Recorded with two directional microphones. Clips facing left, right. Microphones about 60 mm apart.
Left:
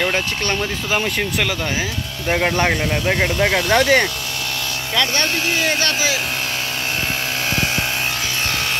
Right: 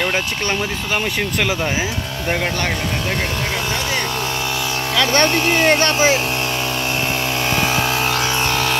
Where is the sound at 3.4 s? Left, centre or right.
Left.